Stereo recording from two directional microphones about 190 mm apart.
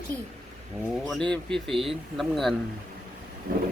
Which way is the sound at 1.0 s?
Centre (ahead or behind).